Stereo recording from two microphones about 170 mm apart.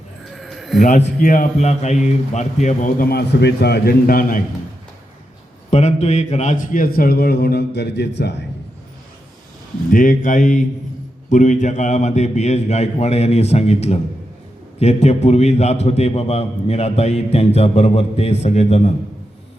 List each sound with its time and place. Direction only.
0.3 s sheep: centre (ahead or behind)
0.8 s a man's voice: 45° left (ahead or behind)
3.1 s a man's voice: 75° left (ahead or behind); by 4.4 s 55° left (ahead or behind)
5.7 s a man's voice: 40° left (ahead or behind); by 8.4 s 90° left
9.9 s a man's voice: 50° left (ahead or behind)